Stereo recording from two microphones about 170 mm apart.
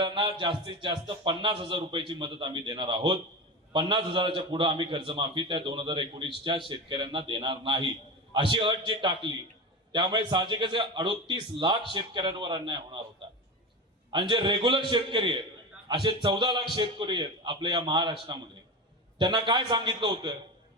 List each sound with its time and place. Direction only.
0.0 s a man's voice: 25° right (ahead or behind)
14.1 s a man's voice: 30° right (ahead or behind)